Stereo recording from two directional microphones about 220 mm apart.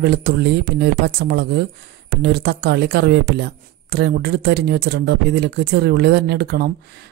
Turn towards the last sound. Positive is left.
turn(degrees=-50)  # may be behind; listen again after turning